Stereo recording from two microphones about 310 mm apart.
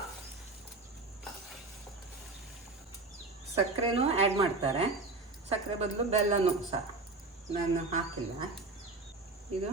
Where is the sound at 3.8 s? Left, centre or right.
Centre.